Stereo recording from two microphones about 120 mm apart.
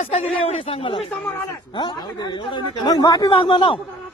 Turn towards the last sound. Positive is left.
turn(degrees=45)  # may be behind; listen again after turning